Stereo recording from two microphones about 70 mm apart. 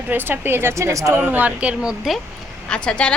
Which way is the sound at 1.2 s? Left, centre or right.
Right.